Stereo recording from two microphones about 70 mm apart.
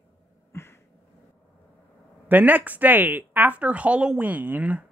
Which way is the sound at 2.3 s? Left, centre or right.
Right.